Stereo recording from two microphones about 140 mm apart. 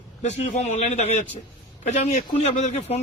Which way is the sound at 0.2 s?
55° left (ahead or behind).